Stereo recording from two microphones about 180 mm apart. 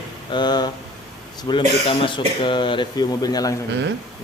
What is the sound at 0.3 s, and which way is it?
Speech, 25° left (ahead or behind).